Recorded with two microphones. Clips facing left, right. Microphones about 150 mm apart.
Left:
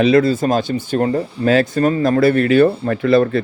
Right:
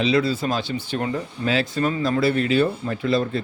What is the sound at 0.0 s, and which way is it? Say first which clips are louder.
Speech: left 7 dB; 50° left (ahead or behind).